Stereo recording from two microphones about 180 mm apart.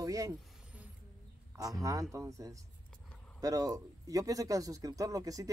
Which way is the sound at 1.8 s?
20° right (ahead or behind).